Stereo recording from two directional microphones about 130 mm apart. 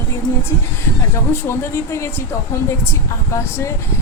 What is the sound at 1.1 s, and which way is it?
A woman's voice, 20° left (ahead or behind).